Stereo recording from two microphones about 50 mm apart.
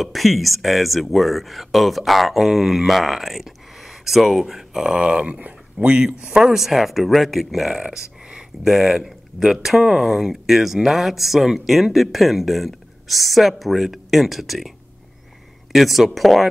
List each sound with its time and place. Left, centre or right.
0.0 s speech: centre
5.3 s speech: right
6.2 s speech: centre
15.7 s speech: centre